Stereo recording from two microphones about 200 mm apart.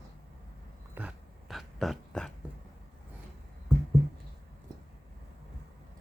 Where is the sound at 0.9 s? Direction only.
5° right (ahead or behind).